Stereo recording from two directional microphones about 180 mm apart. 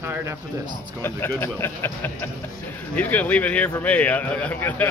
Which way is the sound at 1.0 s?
10° left (ahead or behind).